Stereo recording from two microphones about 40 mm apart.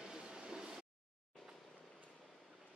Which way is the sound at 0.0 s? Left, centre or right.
Centre.